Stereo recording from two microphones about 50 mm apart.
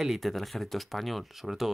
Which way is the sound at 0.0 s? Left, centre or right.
Centre.